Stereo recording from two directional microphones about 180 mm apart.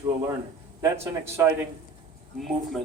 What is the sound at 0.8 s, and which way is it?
Speech, 15° right (ahead or behind).